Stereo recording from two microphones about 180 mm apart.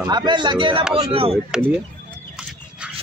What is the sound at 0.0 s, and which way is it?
Speech, 25° right (ahead or behind).